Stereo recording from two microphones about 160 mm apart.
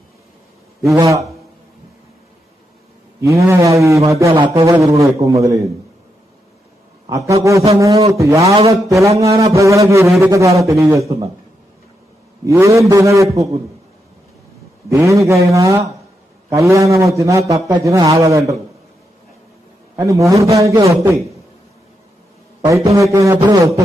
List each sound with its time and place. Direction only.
0.8 s a man's voice: 20° right (ahead or behind)
3.2 s a man's voice: 20° right (ahead or behind)
7.1 s a man's voice: 20° right (ahead or behind)
8.5 s a man's voice: 40° right (ahead or behind)
8.8 s a man's voice: 20° right (ahead or behind)
12.4 s a man's voice: 20° right (ahead or behind)
14.9 s a man's voice: 20° right (ahead or behind)
20.0 s a man's voice: 20° right (ahead or behind)
22.8 s a man's voice: 20° right (ahead or behind)